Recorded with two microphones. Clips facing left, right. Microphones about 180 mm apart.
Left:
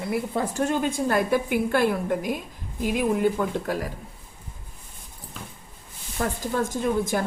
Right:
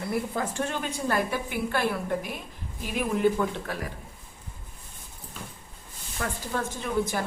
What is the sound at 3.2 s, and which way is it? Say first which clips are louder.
Speech: left 1 dB; 45° left (ahead or behind).